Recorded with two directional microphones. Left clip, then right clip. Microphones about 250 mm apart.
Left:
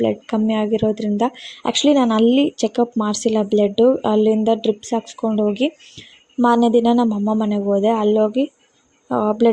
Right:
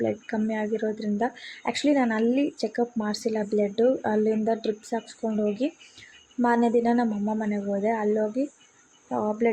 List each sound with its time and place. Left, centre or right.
0.0 s speech: left